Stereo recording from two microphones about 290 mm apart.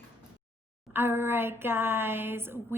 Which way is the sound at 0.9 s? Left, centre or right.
Centre.